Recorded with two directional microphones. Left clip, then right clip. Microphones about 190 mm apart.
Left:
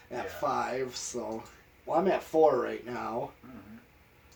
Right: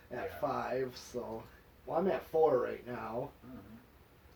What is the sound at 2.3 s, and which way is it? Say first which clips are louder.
Speech: left 5 dB; 60° left (ahead or behind).